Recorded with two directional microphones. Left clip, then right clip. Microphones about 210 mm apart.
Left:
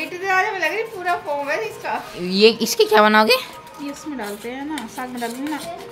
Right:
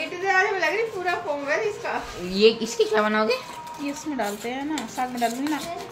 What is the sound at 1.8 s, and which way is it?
Speech, 55° left (ahead or behind).